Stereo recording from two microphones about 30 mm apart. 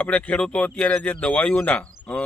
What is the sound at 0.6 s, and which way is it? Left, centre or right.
A man's voice, left.